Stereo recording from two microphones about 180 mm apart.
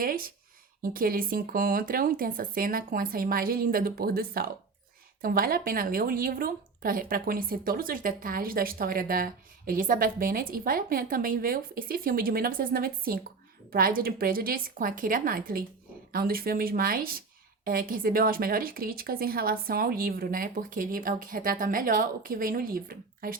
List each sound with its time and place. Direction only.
0.0 s a woman's voice: 50° right (ahead or behind)